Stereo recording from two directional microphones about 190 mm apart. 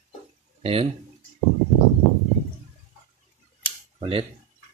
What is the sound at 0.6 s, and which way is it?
Speech, 30° right (ahead or behind).